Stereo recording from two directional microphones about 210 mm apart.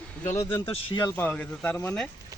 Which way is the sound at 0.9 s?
20° left (ahead or behind).